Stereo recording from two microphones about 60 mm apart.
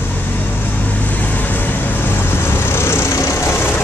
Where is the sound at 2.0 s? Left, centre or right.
Left.